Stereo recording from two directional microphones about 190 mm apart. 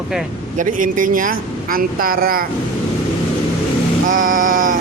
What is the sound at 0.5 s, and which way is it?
Speech, 45° right (ahead or behind).